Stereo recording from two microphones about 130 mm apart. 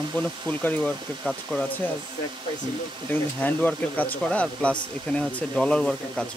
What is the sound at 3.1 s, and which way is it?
Speech, 15° left (ahead or behind).